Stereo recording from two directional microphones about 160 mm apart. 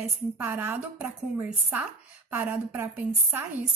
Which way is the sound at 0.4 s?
15° right (ahead or behind).